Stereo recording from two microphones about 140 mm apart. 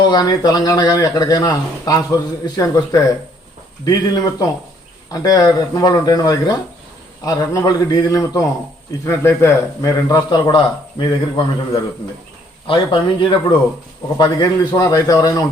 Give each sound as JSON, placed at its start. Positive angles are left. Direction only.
{"t": 0.0, "sound": "a man's voice", "side_deg": 30}